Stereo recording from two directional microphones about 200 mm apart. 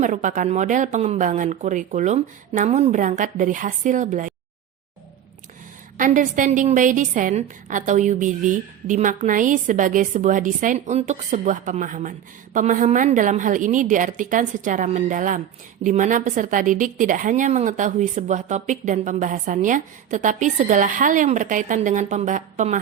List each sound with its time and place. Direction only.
0.0 s a woman's voice: 40° right (ahead or behind)
6.0 s a woman's voice: 40° right (ahead or behind)